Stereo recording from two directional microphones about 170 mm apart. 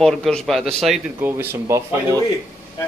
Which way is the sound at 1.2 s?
15° right (ahead or behind).